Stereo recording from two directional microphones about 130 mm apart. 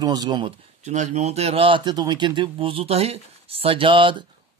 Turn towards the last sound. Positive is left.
turn(degrees=-40)  # may be behind; listen again after turning